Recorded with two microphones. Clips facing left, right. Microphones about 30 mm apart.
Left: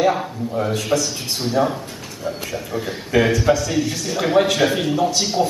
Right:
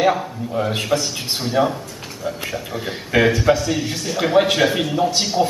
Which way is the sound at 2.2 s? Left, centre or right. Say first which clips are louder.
Right 1 dB; centre.